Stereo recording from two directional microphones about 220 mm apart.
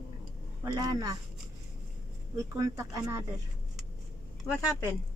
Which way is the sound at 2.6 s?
15° right (ahead or behind).